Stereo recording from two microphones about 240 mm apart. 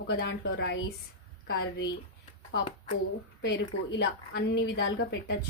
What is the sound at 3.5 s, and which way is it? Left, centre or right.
A woman's voice, left.